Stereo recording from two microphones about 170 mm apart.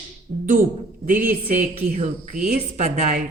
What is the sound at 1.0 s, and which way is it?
Speech, 50° right (ahead or behind).